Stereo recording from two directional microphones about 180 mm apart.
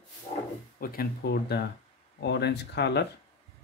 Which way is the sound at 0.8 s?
55° left (ahead or behind).